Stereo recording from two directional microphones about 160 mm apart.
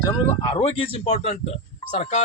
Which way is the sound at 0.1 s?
35° left (ahead or behind).